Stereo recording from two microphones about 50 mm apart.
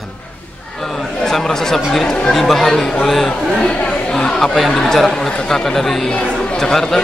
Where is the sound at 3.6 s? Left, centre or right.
Centre.